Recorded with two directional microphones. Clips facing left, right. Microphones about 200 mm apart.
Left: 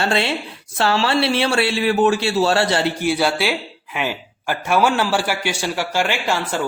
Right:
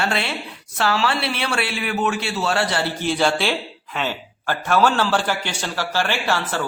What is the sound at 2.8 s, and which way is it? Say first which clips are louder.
Speech: left 2 dB; 10° left (ahead or behind).